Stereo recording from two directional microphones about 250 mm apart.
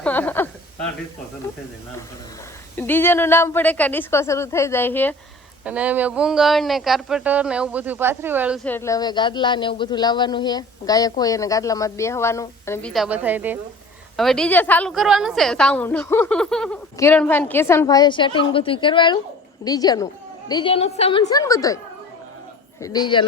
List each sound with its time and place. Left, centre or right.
0.0 s a sound: centre
2.7 s a woman's voice: centre
5.6 s speech: centre
8.6 s a woman's voice: centre
22.8 s a woman's voice: centre